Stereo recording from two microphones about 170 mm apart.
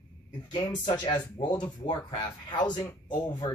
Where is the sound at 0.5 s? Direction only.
25° left (ahead or behind).